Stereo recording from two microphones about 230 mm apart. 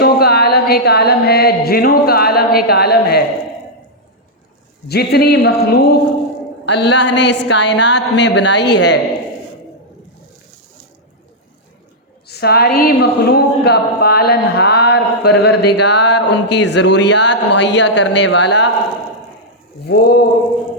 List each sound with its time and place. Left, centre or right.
0.0 s a sound: left
4.9 s a woman's voice: left
12.3 s a woman's voice: left
19.9 s a woman's voice: left